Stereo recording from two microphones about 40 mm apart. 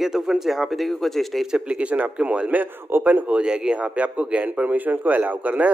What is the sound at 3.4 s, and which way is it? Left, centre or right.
A man's voice, right.